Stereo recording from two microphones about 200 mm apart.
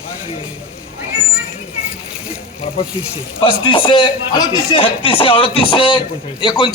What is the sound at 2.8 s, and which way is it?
Speech, 25° left (ahead or behind).